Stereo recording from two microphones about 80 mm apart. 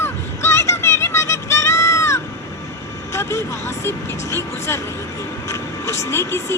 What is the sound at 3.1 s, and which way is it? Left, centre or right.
Music, left.